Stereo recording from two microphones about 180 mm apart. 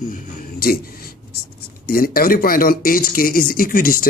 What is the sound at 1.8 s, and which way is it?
Speech, 55° left (ahead or behind).